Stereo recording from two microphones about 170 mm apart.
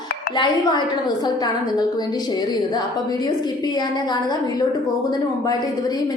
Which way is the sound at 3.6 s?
25° left (ahead or behind).